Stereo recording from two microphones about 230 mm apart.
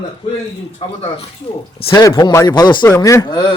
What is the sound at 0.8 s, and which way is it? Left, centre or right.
Speech, left.